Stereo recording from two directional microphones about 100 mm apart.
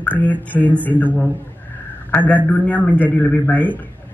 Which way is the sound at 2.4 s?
15° left (ahead or behind).